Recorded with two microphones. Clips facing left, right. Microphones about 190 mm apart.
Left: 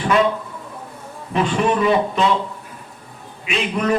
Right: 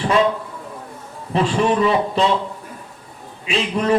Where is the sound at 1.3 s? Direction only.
30° right (ahead or behind).